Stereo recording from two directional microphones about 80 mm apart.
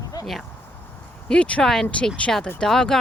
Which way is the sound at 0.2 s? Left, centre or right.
Left.